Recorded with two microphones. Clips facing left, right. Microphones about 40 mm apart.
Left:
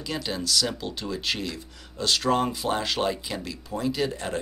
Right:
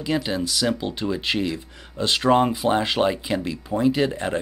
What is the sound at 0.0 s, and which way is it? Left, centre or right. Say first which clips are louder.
Speech: right 6 dB; right.